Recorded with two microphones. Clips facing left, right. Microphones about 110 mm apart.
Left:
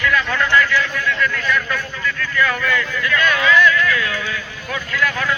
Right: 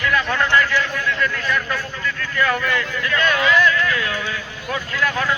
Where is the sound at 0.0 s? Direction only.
30° right (ahead or behind).